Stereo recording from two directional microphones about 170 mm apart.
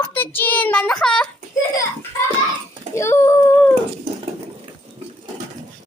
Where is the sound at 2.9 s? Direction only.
15° left (ahead or behind).